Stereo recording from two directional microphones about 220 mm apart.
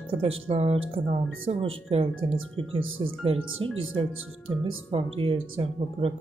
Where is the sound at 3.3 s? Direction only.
65° right (ahead or behind).